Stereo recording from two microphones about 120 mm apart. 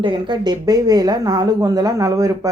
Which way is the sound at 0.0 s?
40° right (ahead or behind).